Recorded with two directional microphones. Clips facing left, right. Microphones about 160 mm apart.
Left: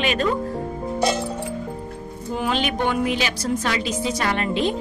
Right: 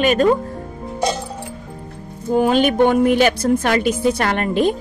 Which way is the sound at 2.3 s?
45° right (ahead or behind).